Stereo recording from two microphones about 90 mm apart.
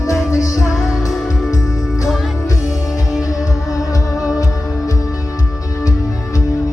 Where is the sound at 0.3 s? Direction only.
40° left (ahead or behind).